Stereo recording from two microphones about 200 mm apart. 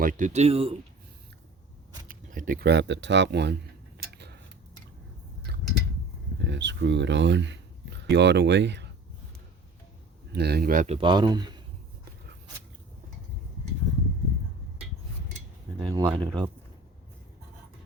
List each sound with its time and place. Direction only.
0.0 s speech: 40° right (ahead or behind)
2.0 s speech: 40° right (ahead or behind); by 3.5 s 60° right (ahead or behind)
3.9 s tick-tock: 55° right (ahead or behind)
5.5 s a sound: 55° right (ahead or behind)
6.4 s speech: 60° right (ahead or behind)
10.3 s speech: 55° right (ahead or behind)
10.9 s speech: 25° right (ahead or behind)
15.8 s speech: 20° right (ahead or behind)